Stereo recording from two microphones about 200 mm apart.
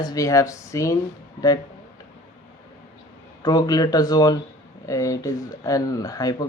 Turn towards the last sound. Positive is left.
turn(degrees=20)  # may be behind; listen again after turning